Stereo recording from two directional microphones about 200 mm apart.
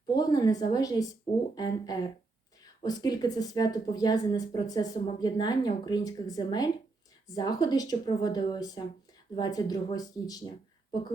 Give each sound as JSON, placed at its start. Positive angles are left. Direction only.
{"t": 0.1, "sound": "speech", "side_deg": 20}